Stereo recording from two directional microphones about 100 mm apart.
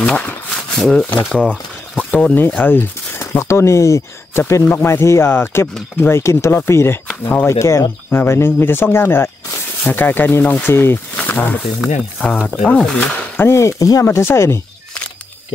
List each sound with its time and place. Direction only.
0.0 s a sound: 10° left (ahead or behind)
1.3 s speech: 10° left (ahead or behind)
7.4 s speech: 30° left (ahead or behind)
11.8 s speech: 5° right (ahead or behind)
12.3 s speech: 15° left (ahead or behind)
13.4 s speech: 30° left (ahead or behind)